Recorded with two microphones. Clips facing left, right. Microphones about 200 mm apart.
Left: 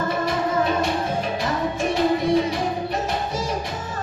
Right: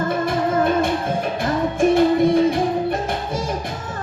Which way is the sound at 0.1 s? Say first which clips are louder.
Right 3 dB; 55° right (ahead or behind).